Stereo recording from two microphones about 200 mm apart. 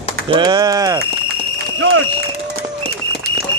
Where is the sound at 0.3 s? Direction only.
20° right (ahead or behind).